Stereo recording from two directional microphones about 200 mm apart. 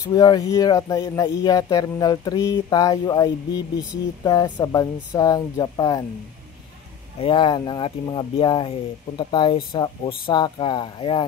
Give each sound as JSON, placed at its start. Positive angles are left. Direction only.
{"t": 0.1, "sound": "speech", "side_deg": 20}
{"t": 7.2, "sound": "speech", "side_deg": 25}